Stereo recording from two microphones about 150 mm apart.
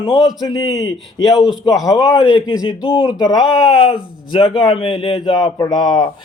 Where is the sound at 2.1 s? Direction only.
25° left (ahead or behind).